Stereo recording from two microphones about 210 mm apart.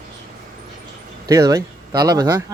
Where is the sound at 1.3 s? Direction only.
15° right (ahead or behind).